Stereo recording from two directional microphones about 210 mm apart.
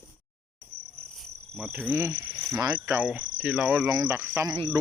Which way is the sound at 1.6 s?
5° right (ahead or behind).